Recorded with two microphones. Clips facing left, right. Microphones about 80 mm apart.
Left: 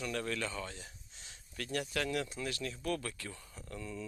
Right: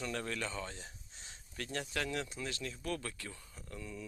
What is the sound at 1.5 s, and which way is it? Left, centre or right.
Speech, right.